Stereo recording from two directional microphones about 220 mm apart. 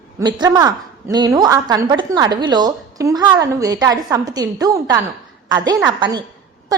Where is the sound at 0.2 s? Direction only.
20° right (ahead or behind).